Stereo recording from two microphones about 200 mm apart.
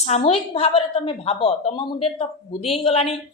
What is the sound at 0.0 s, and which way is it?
A woman's voice, 30° left (ahead or behind).